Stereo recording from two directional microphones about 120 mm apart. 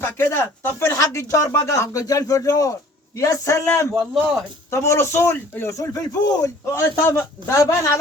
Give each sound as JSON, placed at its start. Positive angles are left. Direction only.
{"t": 0.0, "sound": "a man's voice", "side_deg": 20}